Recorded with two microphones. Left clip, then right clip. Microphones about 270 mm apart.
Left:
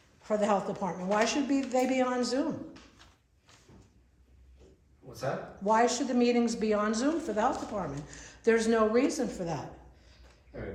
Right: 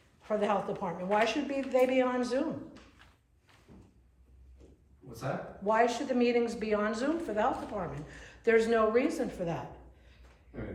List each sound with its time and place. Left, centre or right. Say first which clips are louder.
0.2 s speech: left 2 dB; left
5.6 s speech: left 1 dB; left